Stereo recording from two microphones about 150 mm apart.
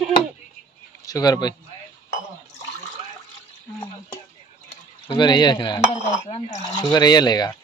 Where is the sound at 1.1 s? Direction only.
25° left (ahead or behind).